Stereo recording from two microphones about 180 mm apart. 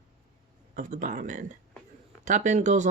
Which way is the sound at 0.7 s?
50° right (ahead or behind).